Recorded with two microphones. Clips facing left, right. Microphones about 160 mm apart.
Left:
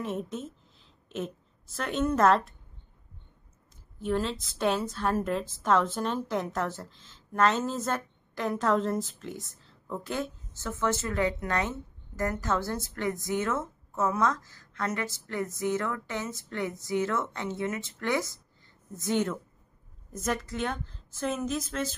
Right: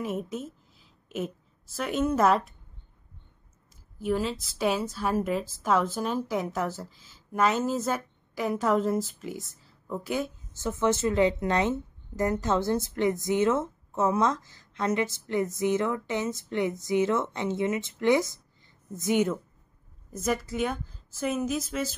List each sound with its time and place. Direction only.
0.0 s a woman's voice: 5° right (ahead or behind)
4.0 s a woman's voice: 5° right (ahead or behind)
10.7 s a woman's voice: 20° right (ahead or behind); by 21.9 s 5° right (ahead or behind)